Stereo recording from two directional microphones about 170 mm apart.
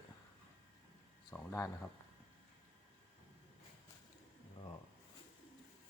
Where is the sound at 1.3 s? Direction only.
20° left (ahead or behind).